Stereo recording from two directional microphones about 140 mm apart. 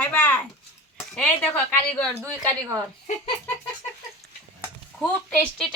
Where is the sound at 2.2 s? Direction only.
20° right (ahead or behind).